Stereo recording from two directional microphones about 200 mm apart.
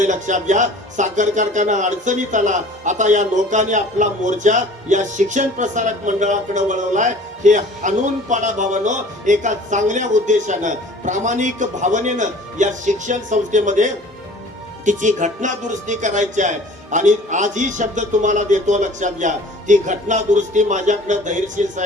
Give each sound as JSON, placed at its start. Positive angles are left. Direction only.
{"t": 0.0, "sound": "speech", "side_deg": -40}